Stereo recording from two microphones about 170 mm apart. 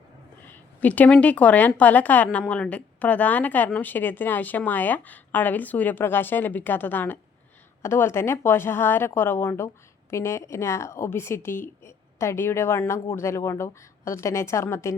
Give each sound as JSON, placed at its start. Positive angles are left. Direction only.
{"t": 0.4, "sound": "a woman's voice", "side_deg": 10}